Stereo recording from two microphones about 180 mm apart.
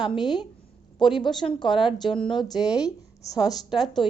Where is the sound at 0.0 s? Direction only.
25° left (ahead or behind).